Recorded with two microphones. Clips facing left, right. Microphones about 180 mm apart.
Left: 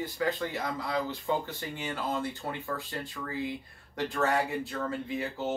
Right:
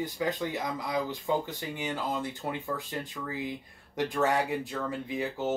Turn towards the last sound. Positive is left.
turn(degrees=-15)  # may be behind; listen again after turning